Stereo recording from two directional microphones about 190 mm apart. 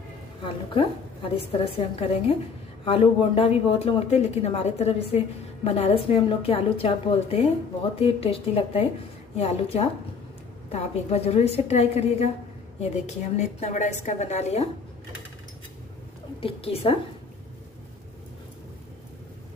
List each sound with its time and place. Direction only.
0.7 s a woman's voice: 30° left (ahead or behind)
16.3 s a woman's voice: 30° left (ahead or behind)